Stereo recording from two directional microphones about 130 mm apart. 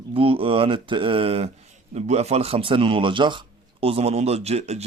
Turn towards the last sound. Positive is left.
turn(degrees=-55)  # may be behind; listen again after turning